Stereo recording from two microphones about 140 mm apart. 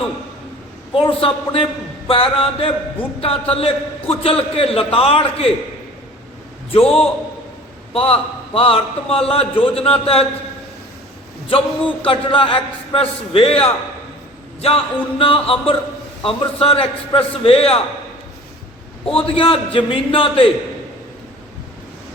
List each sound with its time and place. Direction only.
0.9 s a man's voice: 40° left (ahead or behind)
6.7 s a man's voice: 45° left (ahead or behind)
11.4 s a man's voice: 40° left (ahead or behind)
19.0 s a man's voice: 40° left (ahead or behind)